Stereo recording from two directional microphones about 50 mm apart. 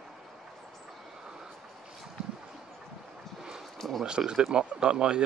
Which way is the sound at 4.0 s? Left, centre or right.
Centre.